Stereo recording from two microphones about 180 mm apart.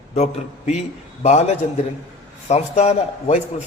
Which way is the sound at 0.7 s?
40° left (ahead or behind).